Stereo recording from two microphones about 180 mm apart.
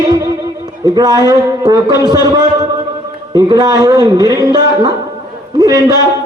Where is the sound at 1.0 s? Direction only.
20° right (ahead or behind).